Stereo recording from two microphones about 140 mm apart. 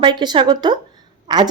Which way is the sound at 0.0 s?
30° right (ahead or behind).